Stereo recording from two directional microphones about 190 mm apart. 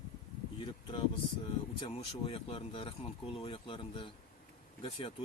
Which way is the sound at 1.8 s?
30° left (ahead or behind).